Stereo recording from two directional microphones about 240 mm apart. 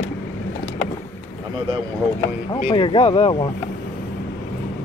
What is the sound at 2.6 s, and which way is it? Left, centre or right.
Speech, left.